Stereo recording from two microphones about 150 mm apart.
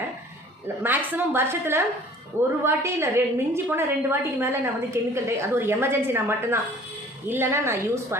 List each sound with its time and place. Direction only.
0.8 s a woman's voice: 15° right (ahead or behind)